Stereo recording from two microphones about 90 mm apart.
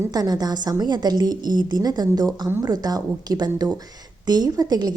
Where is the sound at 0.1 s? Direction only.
45° right (ahead or behind).